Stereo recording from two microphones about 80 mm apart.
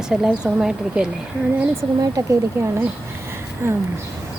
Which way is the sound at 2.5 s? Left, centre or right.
Right.